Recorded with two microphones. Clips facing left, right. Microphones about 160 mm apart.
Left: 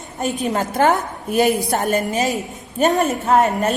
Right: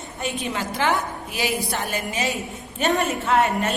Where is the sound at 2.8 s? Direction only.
40° left (ahead or behind).